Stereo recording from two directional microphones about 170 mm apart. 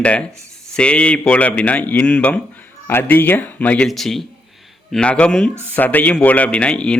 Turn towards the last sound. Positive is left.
turn(degrees=5)  # may be behind; listen again after turning